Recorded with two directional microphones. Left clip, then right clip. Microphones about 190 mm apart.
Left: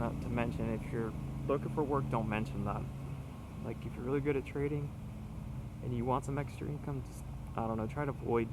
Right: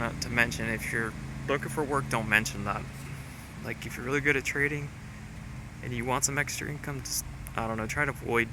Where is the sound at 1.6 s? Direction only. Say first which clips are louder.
Right 5 dB; 30° right (ahead or behind).